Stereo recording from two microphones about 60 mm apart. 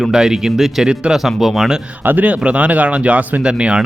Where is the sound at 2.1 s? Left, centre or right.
Right.